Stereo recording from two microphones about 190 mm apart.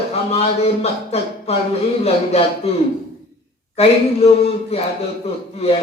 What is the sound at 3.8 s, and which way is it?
Speech, 35° left (ahead or behind).